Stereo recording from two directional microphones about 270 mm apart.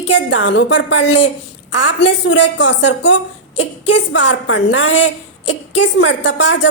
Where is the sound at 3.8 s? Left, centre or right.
Left.